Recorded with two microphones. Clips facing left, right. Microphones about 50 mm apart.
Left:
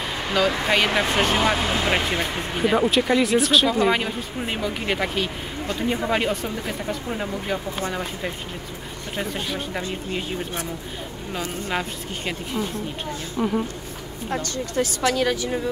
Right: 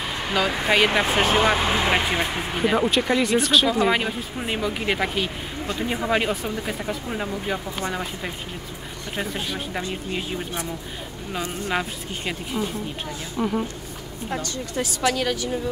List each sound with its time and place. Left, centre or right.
0.3 s speech: centre
1.4 s speech: right
1.9 s speech: centre
11.3 s speech: centre
14.3 s a woman's voice: left